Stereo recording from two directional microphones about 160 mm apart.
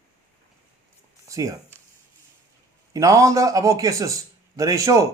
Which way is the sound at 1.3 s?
20° right (ahead or behind).